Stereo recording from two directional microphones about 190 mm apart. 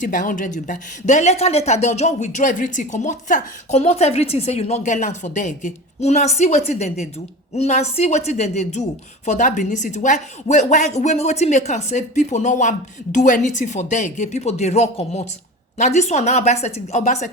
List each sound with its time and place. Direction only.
0.0 s a woman's voice: 45° left (ahead or behind)